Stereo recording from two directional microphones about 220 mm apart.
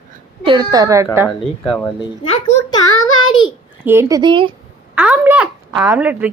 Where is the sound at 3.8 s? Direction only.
10° right (ahead or behind).